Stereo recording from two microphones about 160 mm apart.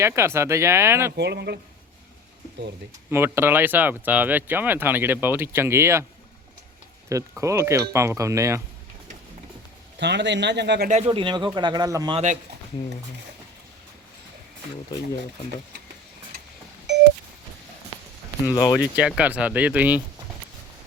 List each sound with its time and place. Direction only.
0.0 s speech: 15° right (ahead or behind)
1.1 s speech: 90° right
3.1 s speech: 15° right (ahead or behind)
7.1 s speech: 20° right (ahead or behind)
10.0 s speech: 90° right
10.8 s speech: 45° right (ahead or behind)
11.1 s speech: 30° right (ahead or behind)
12.1 s speech: 50° right (ahead or behind)
18.4 s speech: 20° left (ahead or behind)
18.8 s speech: 5° right (ahead or behind)